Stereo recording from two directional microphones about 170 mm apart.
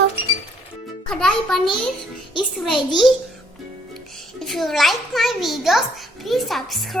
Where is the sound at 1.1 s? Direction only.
5° left (ahead or behind).